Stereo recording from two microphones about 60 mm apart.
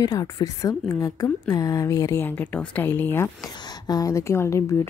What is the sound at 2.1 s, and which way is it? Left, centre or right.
Speech, left.